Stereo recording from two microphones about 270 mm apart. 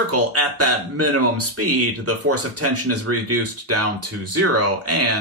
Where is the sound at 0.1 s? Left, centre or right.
Right.